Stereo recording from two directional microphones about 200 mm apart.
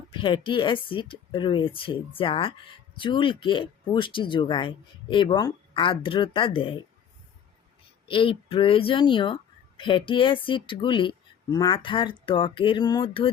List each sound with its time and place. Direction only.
0.1 s speech: 25° left (ahead or behind)
8.0 s speech: 25° left (ahead or behind)